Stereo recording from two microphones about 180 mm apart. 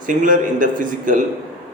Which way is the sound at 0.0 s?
45° right (ahead or behind).